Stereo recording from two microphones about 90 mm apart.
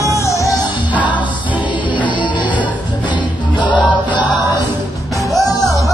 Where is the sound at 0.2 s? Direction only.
35° left (ahead or behind).